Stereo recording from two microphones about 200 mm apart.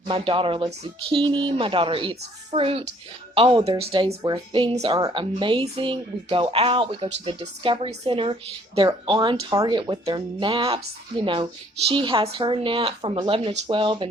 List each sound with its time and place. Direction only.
0.1 s speech: 25° right (ahead or behind)
11.9 s speech: 25° right (ahead or behind)